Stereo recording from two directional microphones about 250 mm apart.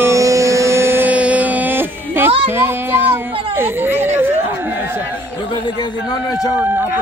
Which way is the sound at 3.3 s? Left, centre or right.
Right.